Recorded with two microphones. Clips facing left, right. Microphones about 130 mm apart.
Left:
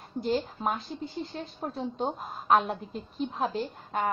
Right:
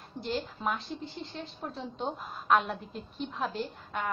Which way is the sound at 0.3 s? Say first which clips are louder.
Left 4 dB; 40° left (ahead or behind).